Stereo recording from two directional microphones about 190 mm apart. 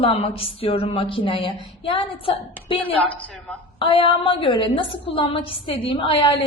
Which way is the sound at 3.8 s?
25° left (ahead or behind).